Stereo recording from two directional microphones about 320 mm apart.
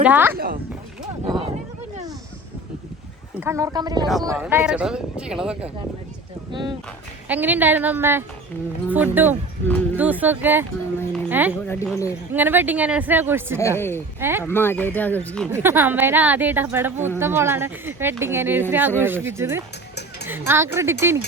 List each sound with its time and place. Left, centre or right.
0.0 s speech: centre
1.2 s a sound: centre
3.4 s speech: centre
6.5 s speech: centre
9.6 s speech: centre
11.7 s speech: centre
12.3 s speech: centre
13.6 s speech: centre
14.2 s speech: centre
14.4 s speech: centre
15.5 s speech: centre
20.7 s speech: centre